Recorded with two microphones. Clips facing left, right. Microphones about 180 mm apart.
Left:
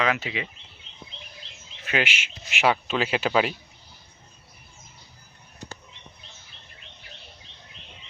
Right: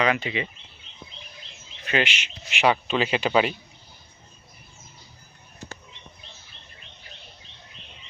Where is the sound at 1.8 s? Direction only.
5° left (ahead or behind).